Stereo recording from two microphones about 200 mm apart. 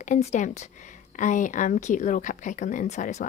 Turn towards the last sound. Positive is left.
turn(degrees=35)  # may be behind; listen again after turning